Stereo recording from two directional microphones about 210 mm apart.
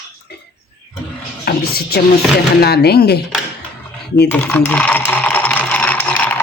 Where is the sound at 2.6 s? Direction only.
50° left (ahead or behind).